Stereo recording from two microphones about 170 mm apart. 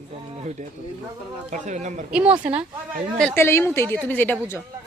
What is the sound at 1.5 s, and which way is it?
Speech, 45° right (ahead or behind).